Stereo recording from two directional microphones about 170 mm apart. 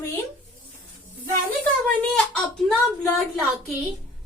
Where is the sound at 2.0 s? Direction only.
Centre (ahead or behind).